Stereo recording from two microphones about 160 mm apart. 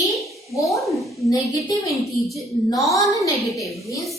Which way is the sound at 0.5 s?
20° left (ahead or behind).